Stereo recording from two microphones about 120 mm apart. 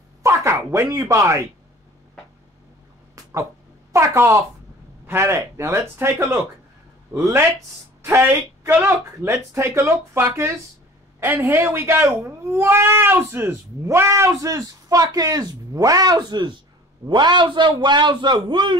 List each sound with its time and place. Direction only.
0.2 s speech: 25° right (ahead or behind)
3.2 s a sound: 30° right (ahead or behind)
3.9 s a man's voice: 25° right (ahead or behind)